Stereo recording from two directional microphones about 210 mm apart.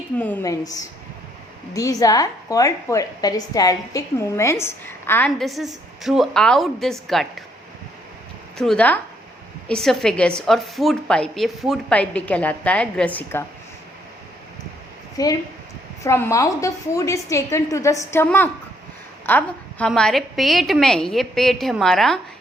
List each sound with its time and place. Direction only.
0.2 s a woman's voice: 10° left (ahead or behind)
8.5 s a woman's voice: 5° left (ahead or behind)
15.2 s a woman's voice: 15° left (ahead or behind); by 22.2 s centre (ahead or behind)